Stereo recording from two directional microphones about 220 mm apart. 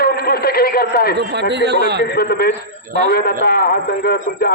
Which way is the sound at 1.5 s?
50° right (ahead or behind).